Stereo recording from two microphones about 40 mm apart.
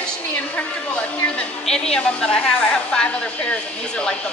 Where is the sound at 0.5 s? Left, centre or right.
Left.